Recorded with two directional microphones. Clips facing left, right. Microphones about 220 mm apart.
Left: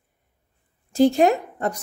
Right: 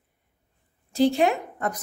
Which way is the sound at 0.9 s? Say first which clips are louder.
Left 4 dB; 45° left (ahead or behind).